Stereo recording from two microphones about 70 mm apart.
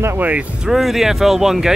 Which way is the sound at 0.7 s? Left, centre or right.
Centre.